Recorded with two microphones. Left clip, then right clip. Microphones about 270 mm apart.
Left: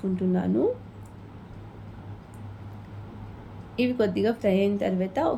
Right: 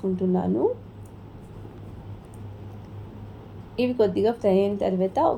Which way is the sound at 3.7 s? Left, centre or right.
Centre.